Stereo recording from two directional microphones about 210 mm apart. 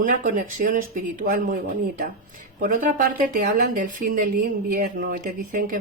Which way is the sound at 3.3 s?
40° right (ahead or behind).